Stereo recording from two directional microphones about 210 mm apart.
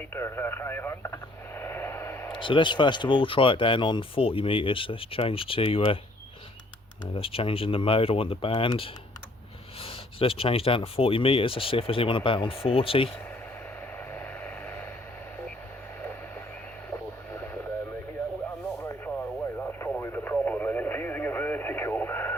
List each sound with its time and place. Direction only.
0.1 s radio: 10° left (ahead or behind)
2.4 s speech: 25° left (ahead or behind)
7.2 s speech: 25° left (ahead or behind)
14.1 s vehicle: 10° left (ahead or behind)
16.9 s radio: 10° left (ahead or behind)
18.8 s radio: 10° left (ahead or behind)